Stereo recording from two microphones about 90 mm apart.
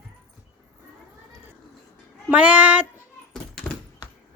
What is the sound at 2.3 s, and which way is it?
Speech, 15° right (ahead or behind).